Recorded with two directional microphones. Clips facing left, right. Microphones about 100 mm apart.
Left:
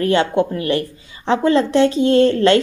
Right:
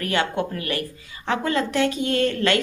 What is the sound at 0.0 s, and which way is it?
Speech, 30° left (ahead or behind).